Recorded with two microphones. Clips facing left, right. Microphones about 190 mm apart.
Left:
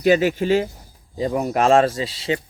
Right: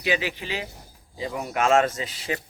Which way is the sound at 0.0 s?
45° left (ahead or behind).